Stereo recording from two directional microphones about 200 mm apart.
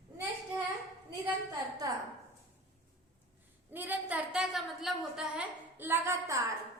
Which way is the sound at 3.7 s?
10° right (ahead or behind).